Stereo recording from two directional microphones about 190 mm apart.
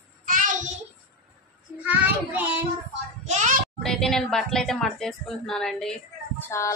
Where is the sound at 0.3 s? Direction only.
45° right (ahead or behind).